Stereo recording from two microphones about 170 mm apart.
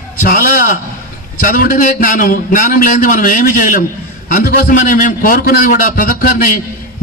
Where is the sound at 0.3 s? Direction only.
55° left (ahead or behind).